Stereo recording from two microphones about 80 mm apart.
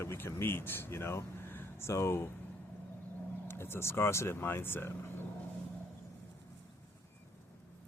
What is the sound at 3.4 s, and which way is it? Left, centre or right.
Speech, left.